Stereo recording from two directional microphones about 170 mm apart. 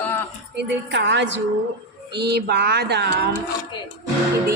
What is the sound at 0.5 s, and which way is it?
Speech, 90° right.